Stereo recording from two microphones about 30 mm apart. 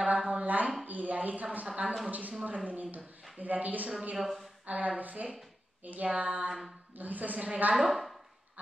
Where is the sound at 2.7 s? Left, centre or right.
Right.